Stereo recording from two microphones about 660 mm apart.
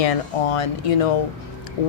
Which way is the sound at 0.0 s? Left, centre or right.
Left.